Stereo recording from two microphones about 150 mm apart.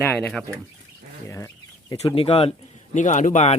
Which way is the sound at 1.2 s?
20° left (ahead or behind).